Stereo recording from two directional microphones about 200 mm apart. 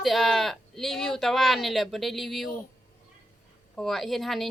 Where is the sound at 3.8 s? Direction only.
Centre (ahead or behind).